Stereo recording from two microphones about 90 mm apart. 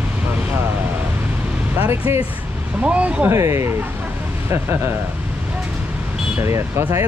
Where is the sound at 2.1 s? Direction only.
30° right (ahead or behind).